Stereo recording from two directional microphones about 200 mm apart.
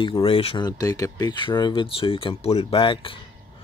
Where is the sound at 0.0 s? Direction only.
25° left (ahead or behind).